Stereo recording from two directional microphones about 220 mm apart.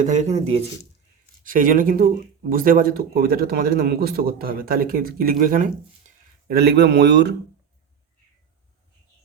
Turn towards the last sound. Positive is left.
turn(degrees=-50)  # may be behind; listen again after turning